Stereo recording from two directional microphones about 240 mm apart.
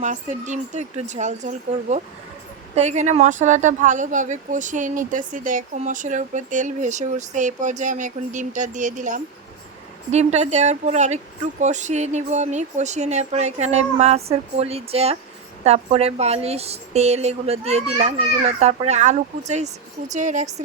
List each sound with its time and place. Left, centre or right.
0.0 s a woman's voice: right